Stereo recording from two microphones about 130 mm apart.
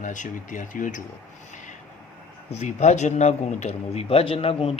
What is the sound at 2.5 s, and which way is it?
Speech, 60° left (ahead or behind).